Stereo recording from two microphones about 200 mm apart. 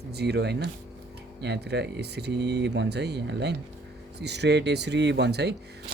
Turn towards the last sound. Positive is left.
turn(degrees=-55)  # may be behind; listen again after turning